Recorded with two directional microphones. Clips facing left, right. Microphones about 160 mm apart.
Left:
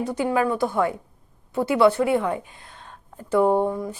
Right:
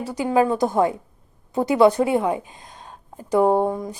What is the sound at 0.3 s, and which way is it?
A woman's voice, 20° right (ahead or behind).